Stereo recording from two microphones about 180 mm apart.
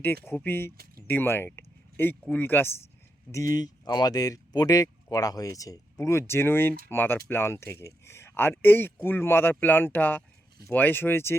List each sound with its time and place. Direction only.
0.3 s speech: 10° left (ahead or behind)